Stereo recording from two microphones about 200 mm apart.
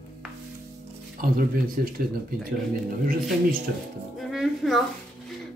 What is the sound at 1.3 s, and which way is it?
Speech, 45° right (ahead or behind).